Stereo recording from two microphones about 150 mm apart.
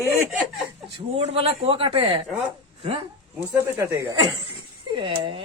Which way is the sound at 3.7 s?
20° right (ahead or behind).